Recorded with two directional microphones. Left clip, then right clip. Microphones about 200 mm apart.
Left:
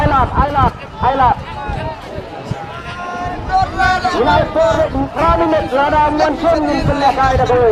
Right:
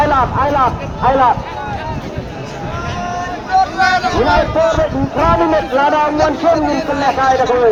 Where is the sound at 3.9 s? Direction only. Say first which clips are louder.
Right 1 dB; 55° left (ahead or behind).